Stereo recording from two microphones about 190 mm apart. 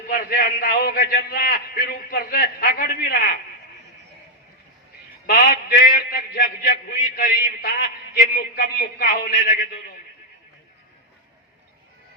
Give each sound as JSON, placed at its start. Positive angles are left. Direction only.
{"t": 0.1, "sound": "a man's voice", "side_deg": 45}
{"t": 5.2, "sound": "a man's voice", "side_deg": 50}